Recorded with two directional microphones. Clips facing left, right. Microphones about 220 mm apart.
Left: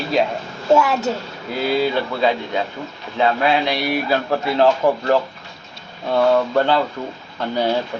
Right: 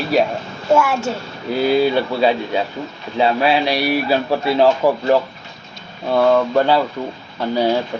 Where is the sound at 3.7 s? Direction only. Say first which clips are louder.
Right 3 dB; 20° left (ahead or behind).